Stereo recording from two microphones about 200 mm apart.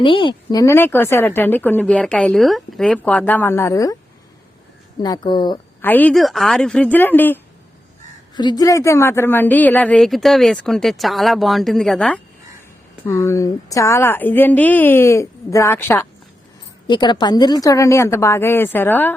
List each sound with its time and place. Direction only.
0.0 s speech: 25° left (ahead or behind)
4.9 s speech: 20° left (ahead or behind)
5.8 s speech: 10° left (ahead or behind)
8.4 s a woman's voice: 20° left (ahead or behind)
16.8 s speech: 20° left (ahead or behind)